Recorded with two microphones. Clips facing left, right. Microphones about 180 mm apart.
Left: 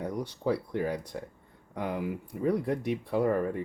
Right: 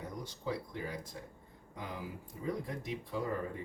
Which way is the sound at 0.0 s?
65° left (ahead or behind).